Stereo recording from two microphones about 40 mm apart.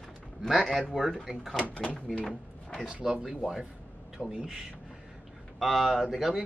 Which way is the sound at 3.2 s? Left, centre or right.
Centre.